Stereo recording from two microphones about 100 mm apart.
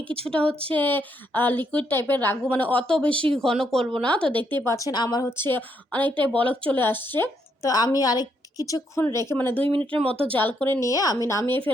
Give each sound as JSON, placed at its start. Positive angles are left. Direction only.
{"t": 0.3, "sound": "speech", "side_deg": 10}
{"t": 4.5, "sound": "a woman's voice", "side_deg": 30}
{"t": 5.2, "sound": "speech", "side_deg": 20}
{"t": 7.6, "sound": "a woman's voice", "side_deg": 40}
{"t": 9.6, "sound": "speech", "side_deg": -60}
{"t": 9.9, "sound": "speech", "side_deg": 15}
{"t": 10.8, "sound": "a woman's voice", "side_deg": 35}